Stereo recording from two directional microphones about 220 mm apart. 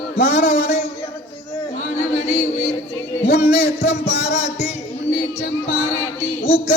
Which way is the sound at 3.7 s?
50° left (ahead or behind).